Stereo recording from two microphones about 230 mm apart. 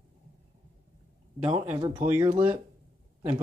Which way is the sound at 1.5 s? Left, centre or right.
Centre.